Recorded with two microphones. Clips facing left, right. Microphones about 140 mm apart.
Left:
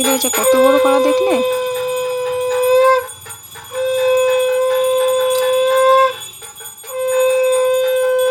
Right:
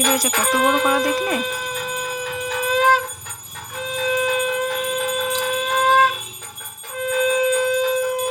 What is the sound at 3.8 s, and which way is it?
Wind instrument, 35° left (ahead or behind).